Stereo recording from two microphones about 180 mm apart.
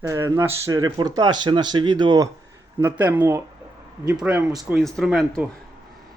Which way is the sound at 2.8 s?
10° right (ahead or behind).